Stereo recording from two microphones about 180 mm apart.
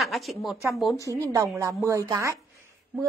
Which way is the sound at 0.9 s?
20° left (ahead or behind).